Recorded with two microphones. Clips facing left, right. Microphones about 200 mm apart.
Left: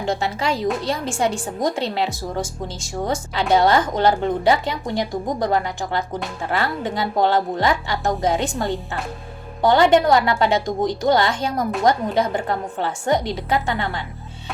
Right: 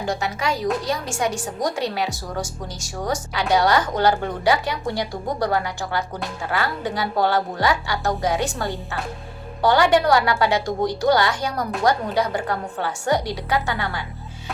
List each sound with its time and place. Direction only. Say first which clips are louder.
0.0 s a woman's voice: left 2 dB; 25° left (ahead or behind)